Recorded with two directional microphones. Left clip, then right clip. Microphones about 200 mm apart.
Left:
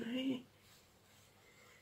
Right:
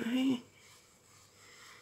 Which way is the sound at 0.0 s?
55° right (ahead or behind).